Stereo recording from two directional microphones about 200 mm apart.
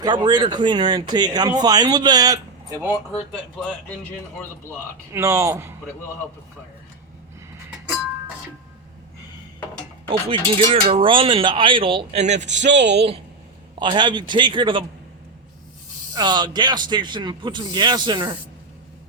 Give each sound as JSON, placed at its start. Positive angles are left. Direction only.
{"t": 0.0, "sound": "speech", "side_deg": -20}
{"t": 5.1, "sound": "speech", "side_deg": -15}
{"t": 10.1, "sound": "speech", "side_deg": -25}
{"t": 13.7, "sound": "speech", "side_deg": -25}
{"t": 16.1, "sound": "speech", "side_deg": -20}